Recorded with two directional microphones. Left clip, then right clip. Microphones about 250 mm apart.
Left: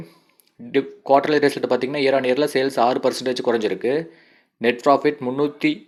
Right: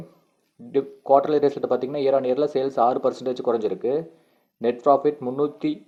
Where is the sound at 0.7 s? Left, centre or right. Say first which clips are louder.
Left 1 dB; left.